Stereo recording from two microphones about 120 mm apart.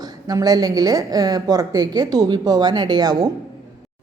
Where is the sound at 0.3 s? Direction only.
30° right (ahead or behind).